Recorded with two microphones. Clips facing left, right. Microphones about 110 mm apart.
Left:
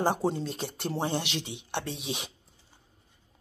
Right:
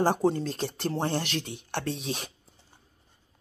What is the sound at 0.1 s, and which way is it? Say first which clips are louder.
Speech: right 3 dB; 15° left (ahead or behind).